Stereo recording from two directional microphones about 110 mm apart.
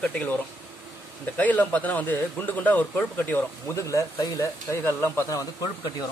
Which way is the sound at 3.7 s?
30° left (ahead or behind).